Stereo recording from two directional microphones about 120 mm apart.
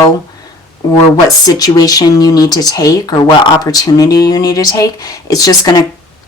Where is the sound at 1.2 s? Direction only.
30° left (ahead or behind).